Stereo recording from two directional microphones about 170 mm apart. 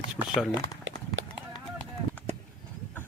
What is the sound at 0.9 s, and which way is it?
Run, 90° right.